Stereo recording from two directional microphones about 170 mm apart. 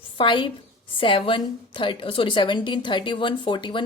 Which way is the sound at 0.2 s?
30° left (ahead or behind).